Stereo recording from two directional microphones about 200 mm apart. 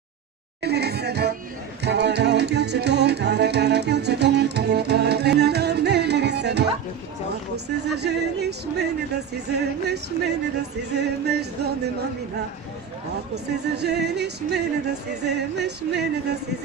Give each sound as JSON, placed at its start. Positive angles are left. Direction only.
{"t": 0.6, "sound": "music", "side_deg": -55}
{"t": 7.5, "sound": "speech", "side_deg": -55}
{"t": 13.1, "sound": "speech", "side_deg": -55}